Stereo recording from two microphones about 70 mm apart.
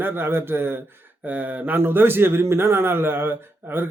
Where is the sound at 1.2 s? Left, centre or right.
Right.